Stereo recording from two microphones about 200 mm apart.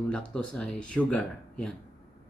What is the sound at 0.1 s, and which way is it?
Speech, 5° left (ahead or behind).